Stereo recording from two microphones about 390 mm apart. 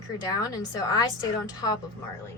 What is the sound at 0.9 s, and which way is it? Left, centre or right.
Speech, centre.